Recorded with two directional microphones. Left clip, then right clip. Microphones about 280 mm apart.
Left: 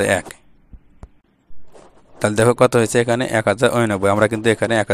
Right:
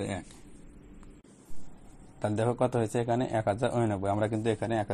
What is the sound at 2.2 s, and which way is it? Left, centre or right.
Speech, left.